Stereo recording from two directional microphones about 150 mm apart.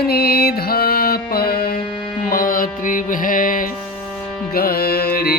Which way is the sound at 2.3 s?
70° left (ahead or behind).